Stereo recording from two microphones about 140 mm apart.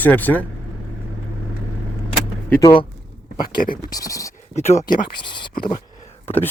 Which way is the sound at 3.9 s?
25° left (ahead or behind).